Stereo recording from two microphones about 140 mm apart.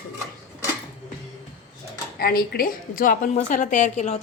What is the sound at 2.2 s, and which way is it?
A woman's voice, 90° left.